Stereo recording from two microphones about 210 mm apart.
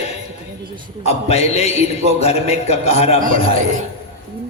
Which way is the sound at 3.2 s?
40° right (ahead or behind).